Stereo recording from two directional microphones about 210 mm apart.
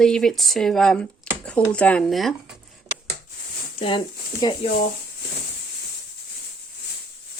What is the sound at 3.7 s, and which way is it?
Speech, 25° left (ahead or behind).